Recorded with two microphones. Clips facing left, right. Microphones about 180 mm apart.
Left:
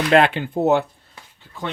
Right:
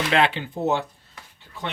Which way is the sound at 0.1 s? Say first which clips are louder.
Left 8 dB; 50° left (ahead or behind).